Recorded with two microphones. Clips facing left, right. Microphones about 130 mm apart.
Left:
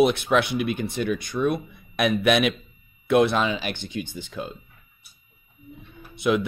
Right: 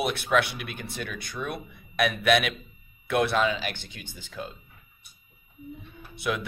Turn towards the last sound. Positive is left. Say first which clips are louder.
# left 8 dB
turn(degrees=20)  # may be behind; listen again after turning